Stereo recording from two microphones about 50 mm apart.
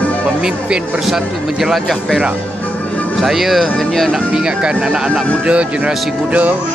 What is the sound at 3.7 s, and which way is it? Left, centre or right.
Speech, centre.